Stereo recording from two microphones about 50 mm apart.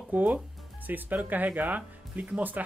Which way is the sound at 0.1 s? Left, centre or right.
Right.